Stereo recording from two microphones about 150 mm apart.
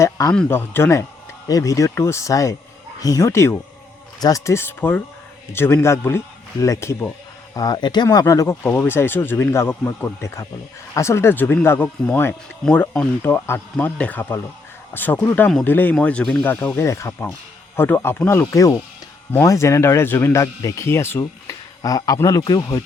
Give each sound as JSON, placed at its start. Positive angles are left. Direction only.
{"t": 0.0, "sound": "speech", "side_deg": 20}